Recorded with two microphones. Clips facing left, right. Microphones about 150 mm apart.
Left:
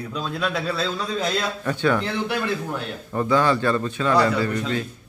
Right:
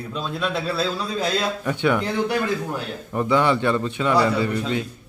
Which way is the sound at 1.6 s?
15° right (ahead or behind).